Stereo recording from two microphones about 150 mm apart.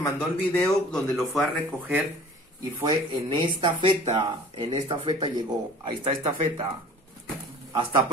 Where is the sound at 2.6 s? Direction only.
30° right (ahead or behind).